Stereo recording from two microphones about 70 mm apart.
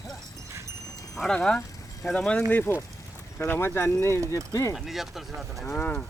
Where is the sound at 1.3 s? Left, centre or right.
Centre.